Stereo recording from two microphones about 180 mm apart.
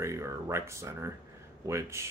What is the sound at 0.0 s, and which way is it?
Speech, 15° right (ahead or behind).